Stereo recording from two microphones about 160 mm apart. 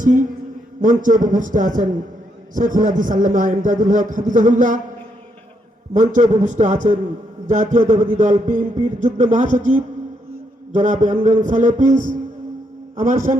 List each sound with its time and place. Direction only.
0.0 s a sound: 55° right (ahead or behind)
0.8 s a man's voice: 55° right (ahead or behind)
5.9 s a man's voice: 55° right (ahead or behind)